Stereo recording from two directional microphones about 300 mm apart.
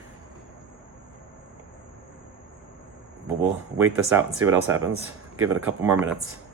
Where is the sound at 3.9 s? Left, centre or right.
Centre.